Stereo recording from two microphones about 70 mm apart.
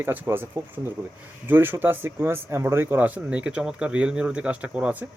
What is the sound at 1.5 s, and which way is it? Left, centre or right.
Speech, right.